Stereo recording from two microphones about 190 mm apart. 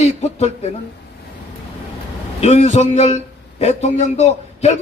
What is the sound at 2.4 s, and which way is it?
A man's voice, 35° left (ahead or behind).